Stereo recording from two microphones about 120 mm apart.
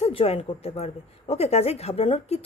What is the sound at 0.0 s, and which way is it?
A woman's voice, 55° left (ahead or behind).